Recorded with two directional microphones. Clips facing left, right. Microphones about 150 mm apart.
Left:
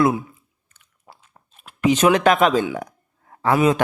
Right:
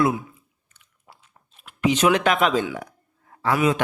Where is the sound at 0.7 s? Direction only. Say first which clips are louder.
Left 4 dB; 45° left (ahead or behind).